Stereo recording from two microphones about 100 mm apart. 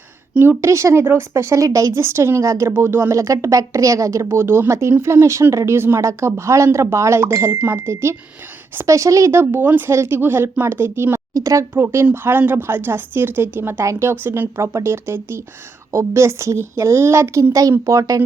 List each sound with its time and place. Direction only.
0.3 s a woman's voice: 25° right (ahead or behind)